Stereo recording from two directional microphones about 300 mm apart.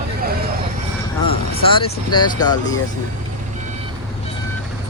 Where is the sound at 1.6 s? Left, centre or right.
Centre.